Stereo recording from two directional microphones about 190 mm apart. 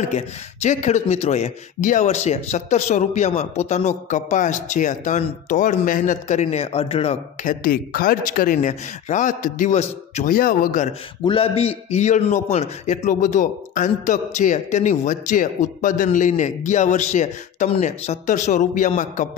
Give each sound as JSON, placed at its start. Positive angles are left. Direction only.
{"t": 0.1, "sound": "a man's voice", "side_deg": 40}
{"t": 7.6, "sound": "a man's voice", "side_deg": 50}
{"t": 11.2, "sound": "a man's voice", "side_deg": 30}